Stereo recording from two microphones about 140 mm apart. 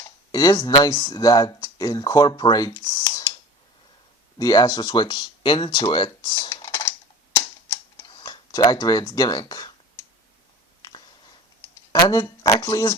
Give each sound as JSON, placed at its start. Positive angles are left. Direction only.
{"t": 0.3, "sound": "speech", "side_deg": 30}
{"t": 4.4, "sound": "speech", "side_deg": 30}
{"t": 8.2, "sound": "speech", "side_deg": 30}
{"t": 11.9, "sound": "speech", "side_deg": 25}